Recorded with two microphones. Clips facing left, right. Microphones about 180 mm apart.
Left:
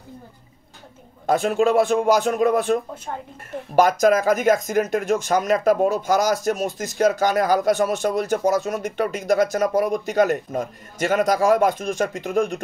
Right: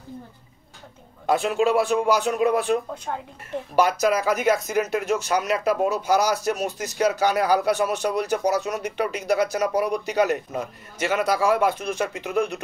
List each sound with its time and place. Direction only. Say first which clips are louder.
1.2 s speech: left 2 dB; 45° left (ahead or behind)